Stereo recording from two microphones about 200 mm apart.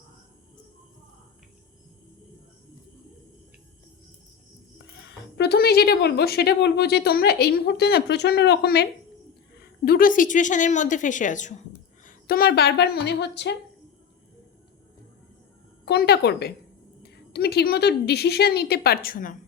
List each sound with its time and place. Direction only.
4.9 s a woman's voice: 60° left (ahead or behind); by 11.5 s 40° left (ahead or behind)
12.0 s speech: 50° left (ahead or behind)
15.9 s a woman's voice: 55° left (ahead or behind)